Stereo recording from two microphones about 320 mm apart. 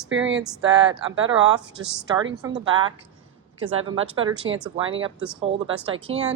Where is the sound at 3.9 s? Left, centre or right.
Centre.